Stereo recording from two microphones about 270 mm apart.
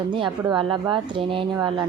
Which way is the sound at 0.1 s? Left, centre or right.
Centre.